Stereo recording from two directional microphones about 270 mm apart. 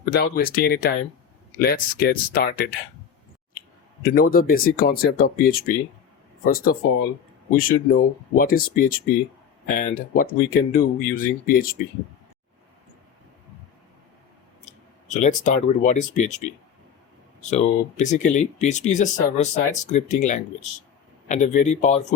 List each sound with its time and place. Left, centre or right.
0.0 s speech: left
4.0 s speech: left
15.1 s speech: left